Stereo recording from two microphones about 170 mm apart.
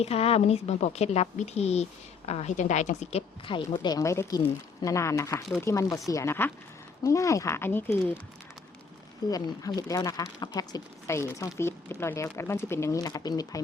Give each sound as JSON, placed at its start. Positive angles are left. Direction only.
{"t": 0.0, "sound": "a woman's voice", "side_deg": 35}
{"t": 9.3, "sound": "speech", "side_deg": 20}